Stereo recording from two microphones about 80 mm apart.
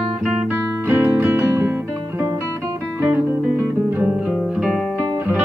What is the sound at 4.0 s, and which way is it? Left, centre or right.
Music, centre.